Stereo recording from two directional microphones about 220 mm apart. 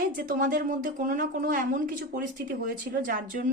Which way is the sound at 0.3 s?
40° right (ahead or behind).